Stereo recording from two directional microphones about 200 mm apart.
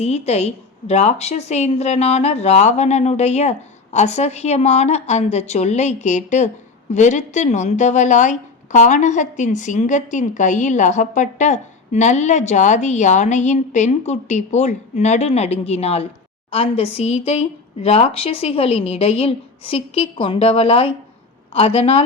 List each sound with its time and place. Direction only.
0.0 s speech: 30° left (ahead or behind)